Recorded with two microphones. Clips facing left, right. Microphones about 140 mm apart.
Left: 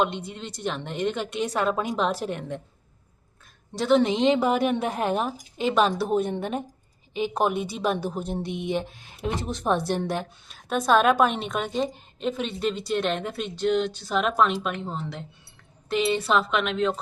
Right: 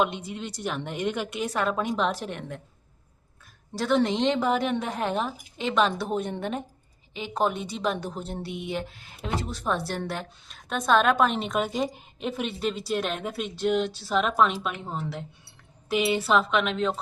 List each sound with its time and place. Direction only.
0.3 s a woman's voice: 10° right (ahead or behind)
3.8 s a woman's voice: centre (ahead or behind)
7.2 s a woman's voice: 15° left (ahead or behind)
10.5 s a woman's voice: 5° left (ahead or behind)